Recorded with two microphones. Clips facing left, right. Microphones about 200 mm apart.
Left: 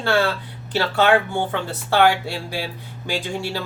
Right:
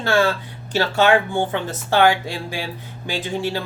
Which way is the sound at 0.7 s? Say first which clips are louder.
Right 1 dB; 15° right (ahead or behind).